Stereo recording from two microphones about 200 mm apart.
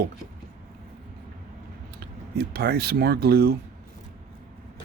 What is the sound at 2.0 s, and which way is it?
Speech, 50° right (ahead or behind).